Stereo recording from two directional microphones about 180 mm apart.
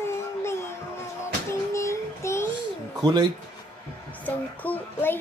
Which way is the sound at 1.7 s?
15° left (ahead or behind).